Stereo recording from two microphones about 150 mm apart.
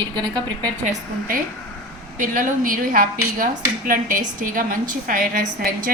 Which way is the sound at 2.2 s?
65° right (ahead or behind).